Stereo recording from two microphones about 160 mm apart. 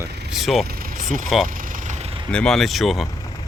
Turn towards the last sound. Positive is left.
turn(degrees=0)  # may be behind; listen again after turning